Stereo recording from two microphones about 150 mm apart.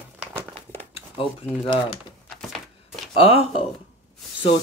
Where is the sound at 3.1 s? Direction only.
40° left (ahead or behind).